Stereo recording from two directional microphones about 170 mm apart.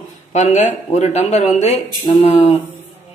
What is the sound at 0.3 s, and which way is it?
Speech, 45° left (ahead or behind).